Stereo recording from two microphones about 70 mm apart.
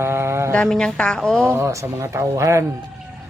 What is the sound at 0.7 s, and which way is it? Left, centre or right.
Speech, centre.